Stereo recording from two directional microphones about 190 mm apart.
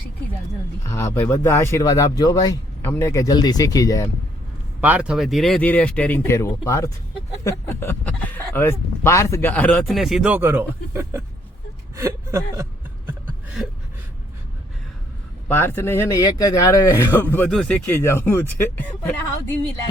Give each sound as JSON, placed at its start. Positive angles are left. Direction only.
{"t": 0.9, "sound": "speech", "side_deg": 15}
{"t": 4.8, "sound": "speech", "side_deg": -10}
{"t": 15.4, "sound": "speech", "side_deg": 10}